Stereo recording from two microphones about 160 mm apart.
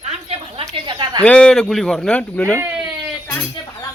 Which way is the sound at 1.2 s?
5° left (ahead or behind).